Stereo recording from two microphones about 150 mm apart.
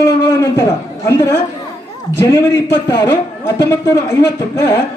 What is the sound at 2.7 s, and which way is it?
A man's voice, 25° left (ahead or behind).